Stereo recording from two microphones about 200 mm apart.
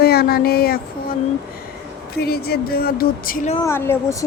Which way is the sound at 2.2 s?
50° left (ahead or behind).